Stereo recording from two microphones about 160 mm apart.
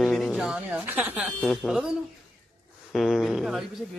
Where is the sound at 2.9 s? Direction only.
Centre (ahead or behind).